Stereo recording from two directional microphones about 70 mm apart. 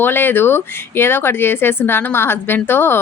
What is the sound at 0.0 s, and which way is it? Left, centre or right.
A woman's voice, left.